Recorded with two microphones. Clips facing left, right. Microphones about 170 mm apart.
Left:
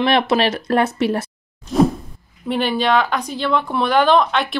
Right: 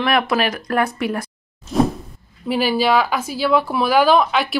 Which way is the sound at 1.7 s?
Centre (ahead or behind).